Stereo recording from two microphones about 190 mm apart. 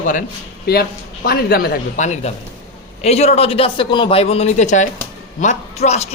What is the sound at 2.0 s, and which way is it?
A man's voice, 40° left (ahead or behind).